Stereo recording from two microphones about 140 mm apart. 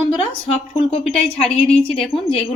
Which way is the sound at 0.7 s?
45° left (ahead or behind).